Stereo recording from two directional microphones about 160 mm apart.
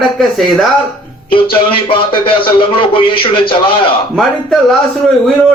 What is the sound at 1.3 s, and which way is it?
A man's voice, 30° left (ahead or behind).